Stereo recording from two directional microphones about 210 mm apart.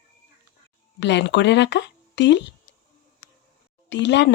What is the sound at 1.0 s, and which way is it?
Speech, 55° left (ahead or behind).